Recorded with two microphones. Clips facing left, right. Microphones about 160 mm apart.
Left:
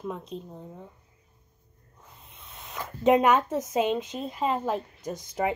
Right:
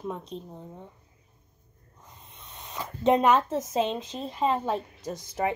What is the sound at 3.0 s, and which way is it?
A woman's voice, 10° left (ahead or behind).